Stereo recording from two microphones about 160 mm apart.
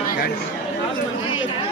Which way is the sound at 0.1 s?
85° left.